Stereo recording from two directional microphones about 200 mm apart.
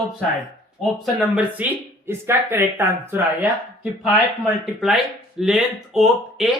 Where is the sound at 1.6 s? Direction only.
5° right (ahead or behind).